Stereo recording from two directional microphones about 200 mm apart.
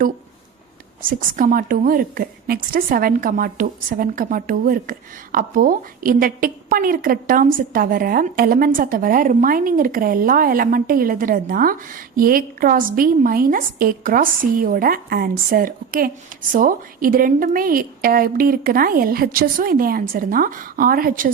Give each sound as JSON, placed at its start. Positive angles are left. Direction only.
{"t": 1.0, "sound": "a woman's voice", "side_deg": -45}